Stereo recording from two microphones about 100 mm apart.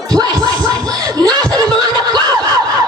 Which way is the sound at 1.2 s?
40° right (ahead or behind).